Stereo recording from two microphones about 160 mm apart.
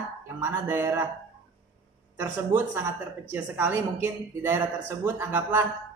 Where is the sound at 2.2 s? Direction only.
15° right (ahead or behind).